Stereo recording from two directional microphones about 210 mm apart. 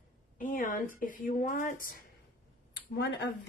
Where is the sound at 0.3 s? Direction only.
40° left (ahead or behind).